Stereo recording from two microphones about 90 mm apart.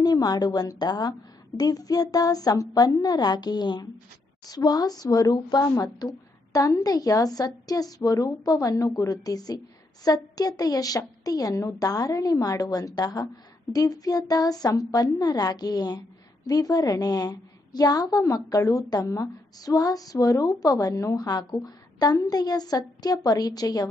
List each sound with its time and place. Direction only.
0.0 s a woman's voice: 45° left (ahead or behind)